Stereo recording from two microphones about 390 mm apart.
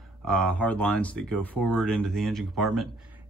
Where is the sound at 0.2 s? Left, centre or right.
Centre.